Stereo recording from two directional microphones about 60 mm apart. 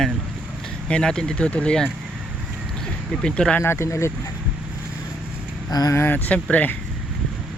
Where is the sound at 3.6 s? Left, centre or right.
Left.